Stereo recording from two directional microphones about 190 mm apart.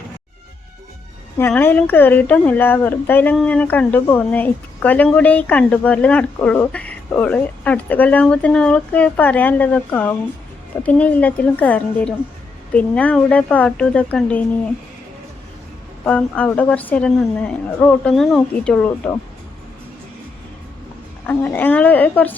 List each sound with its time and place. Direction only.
1.4 s speech: 10° left (ahead or behind)
16.0 s speech: 5° left (ahead or behind)
21.2 s speech: 10° left (ahead or behind)